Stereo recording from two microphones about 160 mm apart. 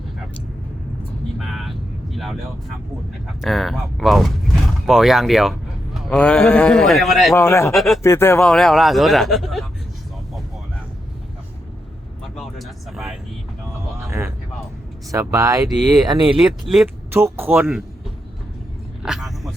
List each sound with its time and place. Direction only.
1.4 s vehicle: centre (ahead or behind)
3.4 s a man's voice: centre (ahead or behind)
7.3 s speech: 15° left (ahead or behind)
7.7 s a man's voice: centre (ahead or behind)
8.0 s speech: 15° left (ahead or behind)
8.4 s a man's voice: 5° left (ahead or behind)
12.4 s a sound: centre (ahead or behind)
15.1 s speech: 20° right (ahead or behind)
16.4 s a man's voice: centre (ahead or behind)
17.1 s speech: 15° right (ahead or behind)
19.0 s a sound: centre (ahead or behind)